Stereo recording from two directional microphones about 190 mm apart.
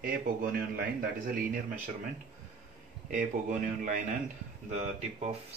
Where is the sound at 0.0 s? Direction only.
50° right (ahead or behind).